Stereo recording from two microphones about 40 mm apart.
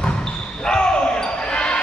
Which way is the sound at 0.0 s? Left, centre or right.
Left.